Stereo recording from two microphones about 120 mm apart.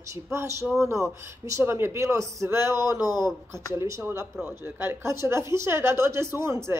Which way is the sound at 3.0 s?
35° left (ahead or behind).